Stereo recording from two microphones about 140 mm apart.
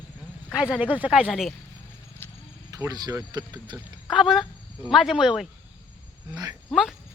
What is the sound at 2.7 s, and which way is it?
Speech, 25° right (ahead or behind).